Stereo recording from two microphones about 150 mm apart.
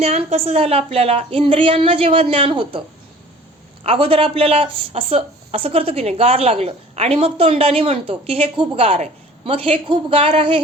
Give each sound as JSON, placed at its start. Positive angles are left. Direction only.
{"t": 0.0, "sound": "speech", "side_deg": -45}
{"t": 3.8, "sound": "speech", "side_deg": -35}